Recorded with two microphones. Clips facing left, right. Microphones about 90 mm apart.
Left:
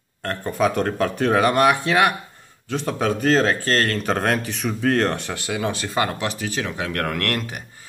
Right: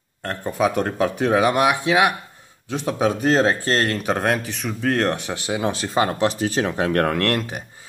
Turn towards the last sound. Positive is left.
turn(degrees=-20)  # may be behind; listen again after turning